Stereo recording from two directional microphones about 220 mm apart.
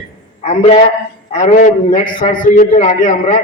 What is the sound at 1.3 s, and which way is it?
A man's voice, 35° left (ahead or behind).